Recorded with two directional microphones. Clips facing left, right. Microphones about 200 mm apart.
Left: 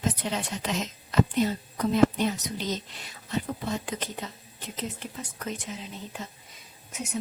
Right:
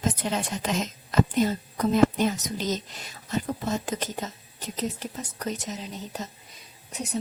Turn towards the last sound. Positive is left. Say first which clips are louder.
# right 2 dB
turn(degrees=-35)  # may be behind; listen again after turning